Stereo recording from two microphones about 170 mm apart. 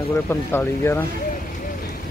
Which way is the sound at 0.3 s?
15° left (ahead or behind).